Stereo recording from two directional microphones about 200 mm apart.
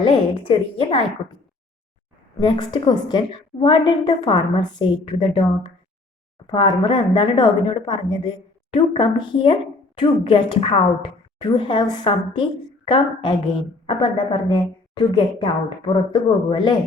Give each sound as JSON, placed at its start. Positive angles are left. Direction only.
{"t": 0.0, "sound": "speech", "side_deg": 25}
{"t": 2.4, "sound": "speech", "side_deg": 20}
{"t": 6.5, "sound": "speech", "side_deg": 25}